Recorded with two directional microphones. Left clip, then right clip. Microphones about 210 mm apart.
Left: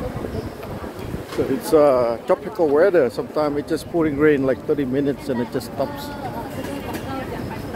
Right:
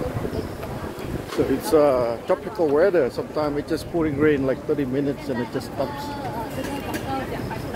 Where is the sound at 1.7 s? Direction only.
15° left (ahead or behind).